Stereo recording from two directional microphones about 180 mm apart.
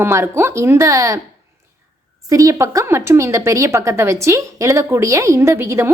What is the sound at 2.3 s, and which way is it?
A woman's voice, 20° right (ahead or behind).